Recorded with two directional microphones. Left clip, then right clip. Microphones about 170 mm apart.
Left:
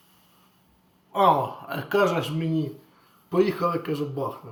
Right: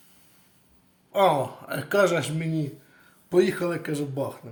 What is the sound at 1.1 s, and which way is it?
Speech, 45° right (ahead or behind).